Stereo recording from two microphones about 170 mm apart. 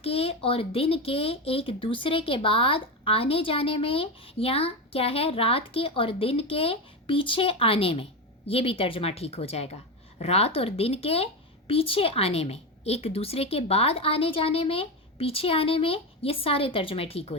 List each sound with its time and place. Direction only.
0.0 s speech: 35° left (ahead or behind)